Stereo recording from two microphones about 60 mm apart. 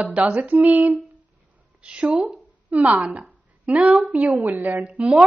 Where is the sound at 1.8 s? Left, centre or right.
Centre.